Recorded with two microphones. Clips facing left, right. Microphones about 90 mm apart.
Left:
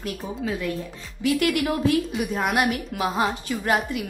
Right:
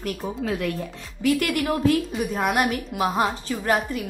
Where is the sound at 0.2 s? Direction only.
40° right (ahead or behind).